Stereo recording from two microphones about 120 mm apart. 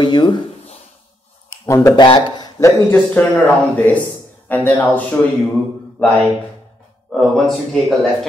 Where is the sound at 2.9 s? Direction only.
15° left (ahead or behind).